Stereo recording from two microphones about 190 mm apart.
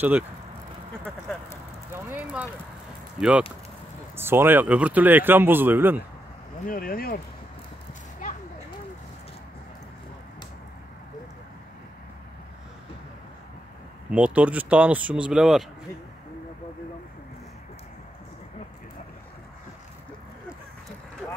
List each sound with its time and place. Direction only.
2.0 s a sound: 10° right (ahead or behind)
3.2 s speech: 5° right (ahead or behind)
6.6 s speech: 45° left (ahead or behind)
14.1 s speech: 5° right (ahead or behind)